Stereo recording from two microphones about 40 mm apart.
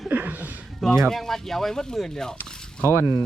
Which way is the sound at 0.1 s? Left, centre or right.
Right.